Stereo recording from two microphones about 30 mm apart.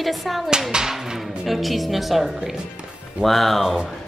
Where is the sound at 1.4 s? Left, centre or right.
Centre.